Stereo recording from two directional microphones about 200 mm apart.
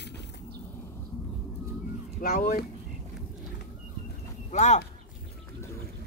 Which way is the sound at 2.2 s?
45° left (ahead or behind).